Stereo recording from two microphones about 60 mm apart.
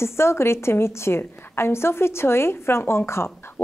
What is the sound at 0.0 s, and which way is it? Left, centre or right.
A woman's voice, left.